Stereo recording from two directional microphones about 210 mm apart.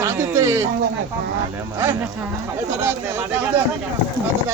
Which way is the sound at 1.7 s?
10° right (ahead or behind).